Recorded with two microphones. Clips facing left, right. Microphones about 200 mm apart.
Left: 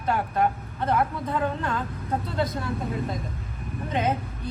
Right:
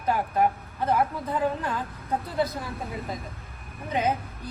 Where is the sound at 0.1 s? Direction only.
5° right (ahead or behind).